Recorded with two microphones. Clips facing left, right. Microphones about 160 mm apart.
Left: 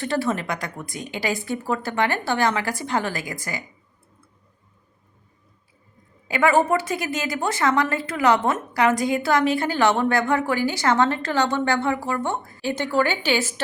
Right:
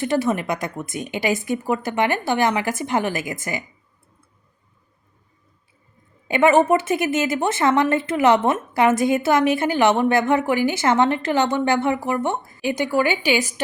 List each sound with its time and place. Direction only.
0.0 s a woman's voice: 20° right (ahead or behind)
6.2 s a woman's voice: 25° right (ahead or behind)